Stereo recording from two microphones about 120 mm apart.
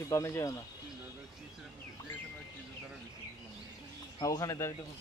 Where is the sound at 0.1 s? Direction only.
25° left (ahead or behind).